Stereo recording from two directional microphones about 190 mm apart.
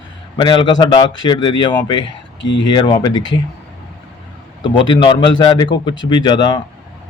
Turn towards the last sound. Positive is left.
turn(degrees=20)  # may be behind; listen again after turning